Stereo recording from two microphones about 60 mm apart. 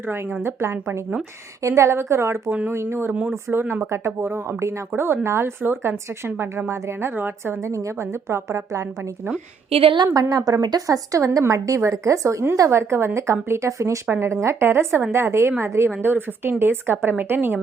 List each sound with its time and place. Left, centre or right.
0.4 s speech: right
2.5 s a woman's voice: right
6.7 s a woman's voice: right
7.6 s a woman's voice: right
10.2 s a woman's voice: right
14.1 s a woman's voice: right